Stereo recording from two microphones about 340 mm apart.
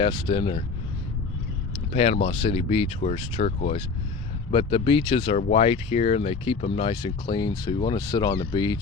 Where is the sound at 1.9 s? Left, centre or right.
Centre.